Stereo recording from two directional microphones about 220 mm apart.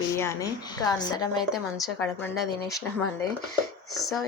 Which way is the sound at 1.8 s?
Centre (ahead or behind).